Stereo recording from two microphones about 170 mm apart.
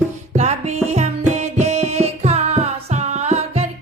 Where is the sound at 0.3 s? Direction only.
40° right (ahead or behind).